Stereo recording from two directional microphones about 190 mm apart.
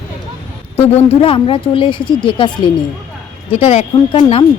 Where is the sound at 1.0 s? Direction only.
30° left (ahead or behind).